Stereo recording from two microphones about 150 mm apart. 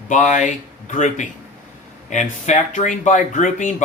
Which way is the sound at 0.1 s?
55° left (ahead or behind).